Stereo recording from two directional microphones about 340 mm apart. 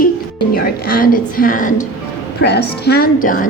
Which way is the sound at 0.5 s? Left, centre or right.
Left.